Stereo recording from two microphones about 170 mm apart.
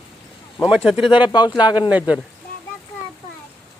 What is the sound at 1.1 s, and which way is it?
Speech, 25° left (ahead or behind).